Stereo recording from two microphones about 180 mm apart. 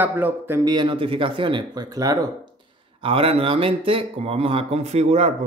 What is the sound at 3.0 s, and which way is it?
Speech, 30° right (ahead or behind).